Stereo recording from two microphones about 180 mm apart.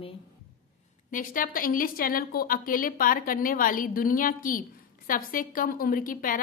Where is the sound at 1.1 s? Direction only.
50° left (ahead or behind).